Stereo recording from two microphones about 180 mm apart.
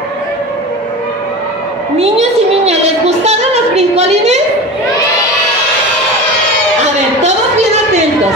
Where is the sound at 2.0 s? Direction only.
35° right (ahead or behind).